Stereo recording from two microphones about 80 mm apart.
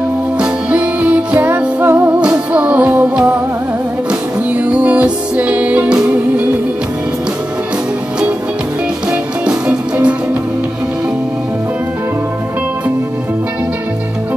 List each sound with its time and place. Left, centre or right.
0.4 s music: centre
9.1 s music: centre